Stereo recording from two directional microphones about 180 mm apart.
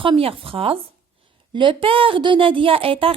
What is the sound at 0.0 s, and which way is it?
A woman's voice, 30° right (ahead or behind).